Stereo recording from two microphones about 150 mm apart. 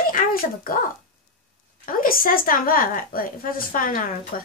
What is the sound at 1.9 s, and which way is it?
Speech, 70° left (ahead or behind).